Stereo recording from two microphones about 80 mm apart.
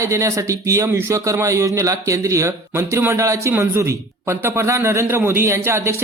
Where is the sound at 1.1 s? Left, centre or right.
Right.